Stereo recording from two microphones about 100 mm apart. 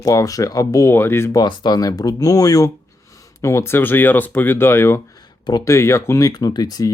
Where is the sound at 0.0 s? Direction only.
35° left (ahead or behind).